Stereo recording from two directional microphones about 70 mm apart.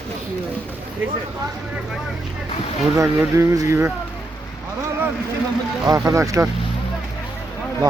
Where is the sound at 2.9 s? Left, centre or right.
Right.